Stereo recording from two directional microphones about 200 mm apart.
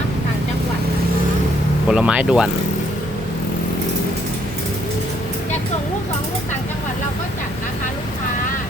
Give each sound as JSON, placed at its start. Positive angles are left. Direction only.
{"t": 1.9, "sound": "speech", "side_deg": -5}